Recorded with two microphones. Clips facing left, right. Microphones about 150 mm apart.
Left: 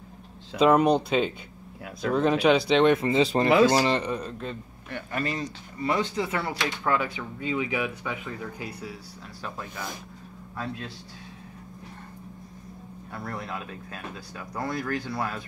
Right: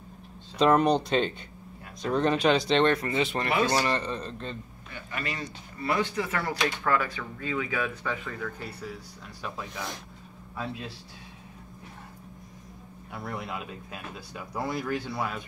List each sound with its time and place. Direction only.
0.6 s speech: 5° left (ahead or behind)
3.0 s speech: 30° left (ahead or behind)
3.7 s speech: 20° left (ahead or behind)
5.1 s speech: 35° left (ahead or behind)
5.8 s speech: 25° left (ahead or behind); by 9.9 s centre (ahead or behind)
13.1 s speech: 5° right (ahead or behind)